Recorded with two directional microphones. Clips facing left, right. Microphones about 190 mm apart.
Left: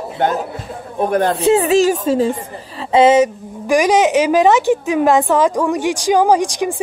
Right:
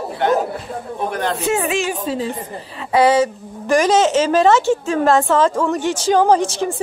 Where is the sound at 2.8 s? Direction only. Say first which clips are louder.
Left 3 dB; 25° left (ahead or behind).